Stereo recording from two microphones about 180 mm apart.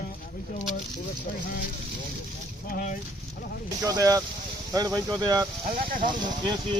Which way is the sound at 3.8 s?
20° right (ahead or behind).